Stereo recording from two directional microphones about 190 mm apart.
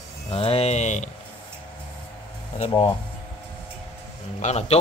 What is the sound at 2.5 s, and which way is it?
Speech, 30° left (ahead or behind).